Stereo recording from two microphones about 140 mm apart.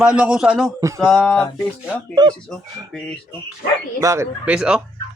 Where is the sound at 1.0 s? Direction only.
5° left (ahead or behind).